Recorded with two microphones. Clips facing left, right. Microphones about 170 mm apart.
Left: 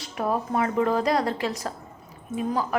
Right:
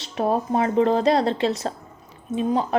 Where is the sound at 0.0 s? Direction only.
25° right (ahead or behind).